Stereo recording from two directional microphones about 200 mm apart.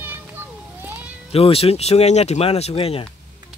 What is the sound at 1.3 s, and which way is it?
Speech, 30° left (ahead or behind).